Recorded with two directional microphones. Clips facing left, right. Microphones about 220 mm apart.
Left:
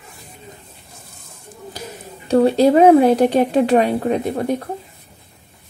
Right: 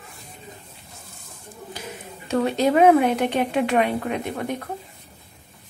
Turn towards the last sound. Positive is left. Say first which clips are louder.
# left 7 dB
turn(degrees=35)  # may be behind; listen again after turning